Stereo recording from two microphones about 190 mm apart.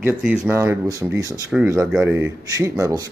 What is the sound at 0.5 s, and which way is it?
Speech, 15° right (ahead or behind).